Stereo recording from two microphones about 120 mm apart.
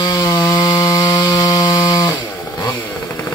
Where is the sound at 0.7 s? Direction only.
35° left (ahead or behind).